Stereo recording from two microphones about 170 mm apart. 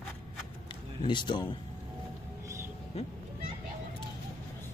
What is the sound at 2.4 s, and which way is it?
Vehicle, 15° right (ahead or behind).